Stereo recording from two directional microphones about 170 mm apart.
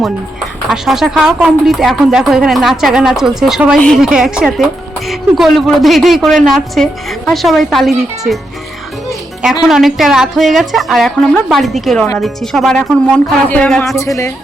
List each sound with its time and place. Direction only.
0.7 s a woman's voice: centre (ahead or behind)
9.4 s a woman's voice: 5° right (ahead or behind)
13.8 s speech: 15° left (ahead or behind)